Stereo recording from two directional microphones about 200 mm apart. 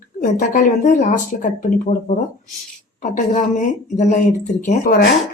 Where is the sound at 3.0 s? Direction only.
35° left (ahead or behind).